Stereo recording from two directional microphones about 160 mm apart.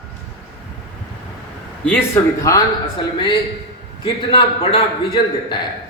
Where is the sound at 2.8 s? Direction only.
30° left (ahead or behind).